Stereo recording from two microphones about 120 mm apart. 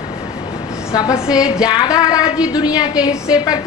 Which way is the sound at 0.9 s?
30° left (ahead or behind).